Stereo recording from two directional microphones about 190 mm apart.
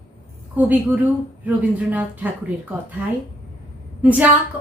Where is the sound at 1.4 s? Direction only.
10° right (ahead or behind).